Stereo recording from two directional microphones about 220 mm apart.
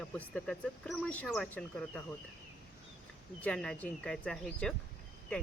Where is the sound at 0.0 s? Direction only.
5° left (ahead or behind).